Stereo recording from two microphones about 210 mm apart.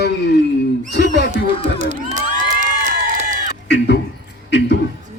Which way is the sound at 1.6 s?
35° right (ahead or behind).